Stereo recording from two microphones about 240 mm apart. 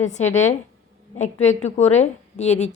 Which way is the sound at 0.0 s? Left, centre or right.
Left.